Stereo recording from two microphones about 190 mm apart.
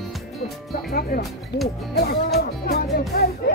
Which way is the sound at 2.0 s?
55° left (ahead or behind).